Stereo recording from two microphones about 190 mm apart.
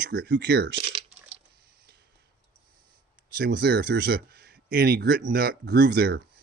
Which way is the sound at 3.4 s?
55° right (ahead or behind).